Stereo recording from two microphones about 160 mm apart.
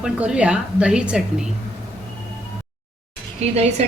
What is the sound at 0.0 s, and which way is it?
A woman's voice, 5° right (ahead or behind).